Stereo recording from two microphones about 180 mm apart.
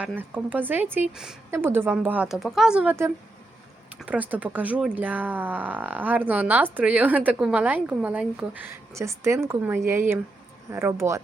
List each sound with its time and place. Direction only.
0.2 s speech: 10° right (ahead or behind)